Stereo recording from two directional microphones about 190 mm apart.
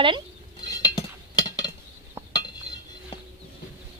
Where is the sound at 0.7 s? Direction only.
20° left (ahead or behind).